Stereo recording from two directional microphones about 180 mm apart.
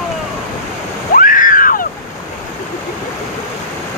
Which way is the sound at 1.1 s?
50° left (ahead or behind).